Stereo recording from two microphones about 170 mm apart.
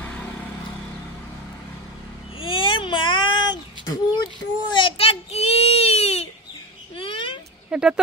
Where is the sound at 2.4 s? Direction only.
30° left (ahead or behind).